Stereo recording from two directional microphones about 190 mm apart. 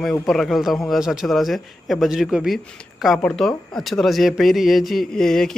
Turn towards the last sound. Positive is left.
turn(degrees=0)  # may be behind; listen again after turning